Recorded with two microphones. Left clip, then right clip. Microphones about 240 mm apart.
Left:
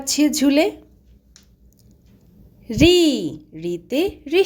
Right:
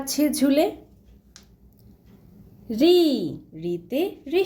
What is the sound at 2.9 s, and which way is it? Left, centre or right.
Speech, left.